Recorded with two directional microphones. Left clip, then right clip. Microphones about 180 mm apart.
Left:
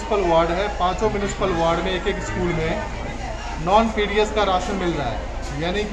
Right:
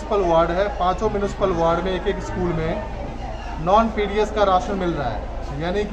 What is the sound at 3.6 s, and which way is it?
A man's voice, 10° right (ahead or behind).